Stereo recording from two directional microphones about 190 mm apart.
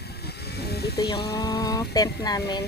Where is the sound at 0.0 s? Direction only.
60° left (ahead or behind).